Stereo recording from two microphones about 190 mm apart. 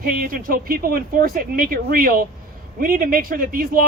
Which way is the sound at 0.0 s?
50° right (ahead or behind).